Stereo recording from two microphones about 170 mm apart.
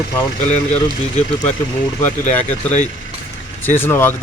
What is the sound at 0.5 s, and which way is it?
Speech, 40° left (ahead or behind).